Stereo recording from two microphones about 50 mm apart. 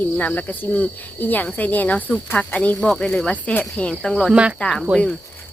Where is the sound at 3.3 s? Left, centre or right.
Left.